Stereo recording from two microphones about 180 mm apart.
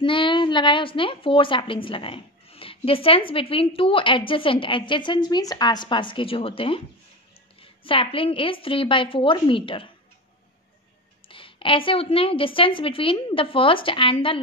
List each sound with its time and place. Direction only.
0.0 s a woman's voice: 25° left (ahead or behind)
7.8 s a woman's voice: 30° left (ahead or behind)
11.2 s a woman's voice: 30° left (ahead or behind)